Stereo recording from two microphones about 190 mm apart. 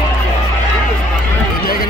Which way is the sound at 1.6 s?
50° left (ahead or behind).